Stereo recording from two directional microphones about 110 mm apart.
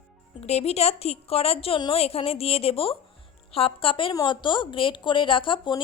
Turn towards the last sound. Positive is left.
turn(degrees=50)  # may be behind; listen again after turning